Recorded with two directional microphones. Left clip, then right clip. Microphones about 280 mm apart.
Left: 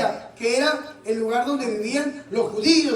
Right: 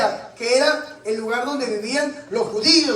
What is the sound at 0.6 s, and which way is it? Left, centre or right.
A man's voice, right.